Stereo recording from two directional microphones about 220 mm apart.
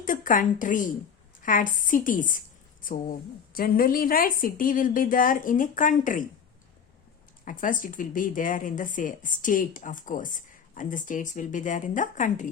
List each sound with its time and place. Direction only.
0.0 s a woman's voice: 35° left (ahead or behind)
7.4 s a woman's voice: 35° left (ahead or behind)